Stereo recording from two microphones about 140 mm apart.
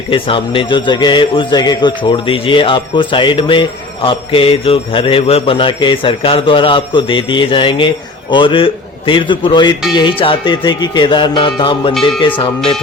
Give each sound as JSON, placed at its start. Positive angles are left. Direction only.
{"t": 0.1, "sound": "a man's voice", "side_deg": 40}